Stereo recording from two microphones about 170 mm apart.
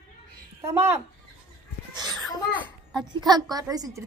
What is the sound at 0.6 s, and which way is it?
Speech, 15° right (ahead or behind).